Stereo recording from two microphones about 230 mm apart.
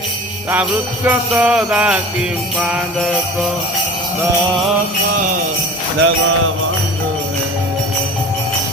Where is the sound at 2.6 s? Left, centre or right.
Centre.